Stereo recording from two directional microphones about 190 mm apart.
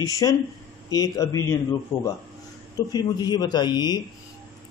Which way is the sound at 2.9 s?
20° left (ahead or behind).